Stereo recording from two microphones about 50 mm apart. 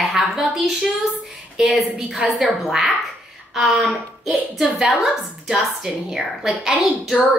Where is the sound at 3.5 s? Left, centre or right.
Centre.